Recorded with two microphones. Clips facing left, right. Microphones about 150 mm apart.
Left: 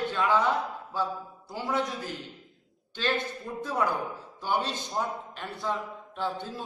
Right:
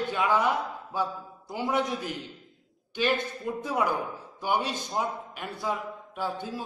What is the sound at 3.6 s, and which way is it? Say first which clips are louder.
A man's voice: even; 15° right (ahead or behind).